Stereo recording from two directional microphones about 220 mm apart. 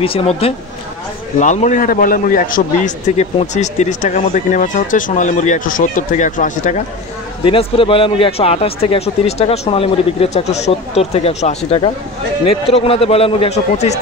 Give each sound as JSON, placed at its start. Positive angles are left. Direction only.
{"t": 0.0, "sound": "a man's voice", "side_deg": 25}
{"t": 7.4, "sound": "speech", "side_deg": 25}